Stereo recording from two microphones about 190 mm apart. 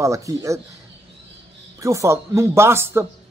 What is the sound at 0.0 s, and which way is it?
Speech, 15° right (ahead or behind).